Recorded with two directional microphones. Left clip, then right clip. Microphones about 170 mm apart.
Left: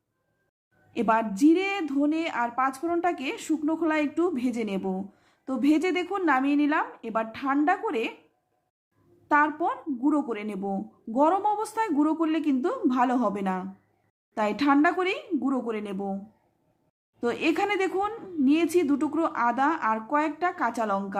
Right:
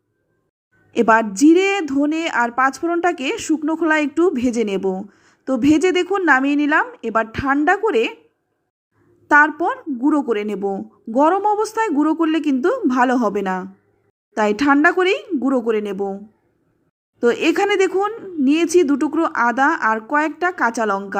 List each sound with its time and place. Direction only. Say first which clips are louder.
0.9 s a woman's voice: right 10 dB; 30° right (ahead or behind)
9.3 s speech: right 9 dB; 30° right (ahead or behind)
17.2 s speech: right 9 dB; 30° right (ahead or behind)